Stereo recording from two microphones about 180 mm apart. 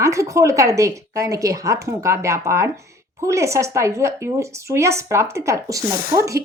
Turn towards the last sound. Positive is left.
turn(degrees=-15)  # may be behind; listen again after turning